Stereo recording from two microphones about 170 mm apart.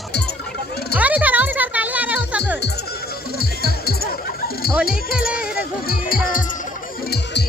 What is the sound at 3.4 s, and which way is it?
Music, 65° left (ahead or behind).